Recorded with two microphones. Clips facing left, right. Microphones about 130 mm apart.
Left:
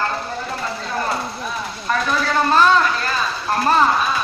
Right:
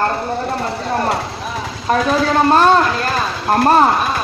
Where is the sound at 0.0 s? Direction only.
55° right (ahead or behind); by 1.9 s 90° right.